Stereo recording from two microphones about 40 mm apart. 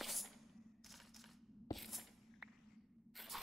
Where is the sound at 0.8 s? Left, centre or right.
Centre.